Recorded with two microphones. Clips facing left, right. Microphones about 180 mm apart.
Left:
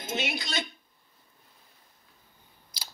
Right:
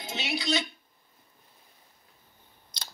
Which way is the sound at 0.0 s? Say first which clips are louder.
Even; 50° left (ahead or behind).